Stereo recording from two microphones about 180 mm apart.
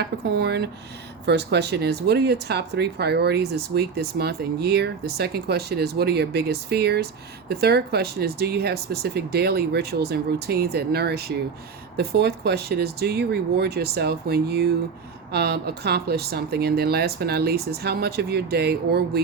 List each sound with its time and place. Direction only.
0.0 s speech: 65° right (ahead or behind)